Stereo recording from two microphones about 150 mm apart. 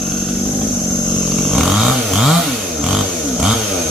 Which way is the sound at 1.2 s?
Centre (ahead or behind).